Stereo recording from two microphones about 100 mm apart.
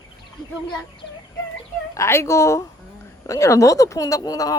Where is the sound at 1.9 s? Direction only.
30° left (ahead or behind).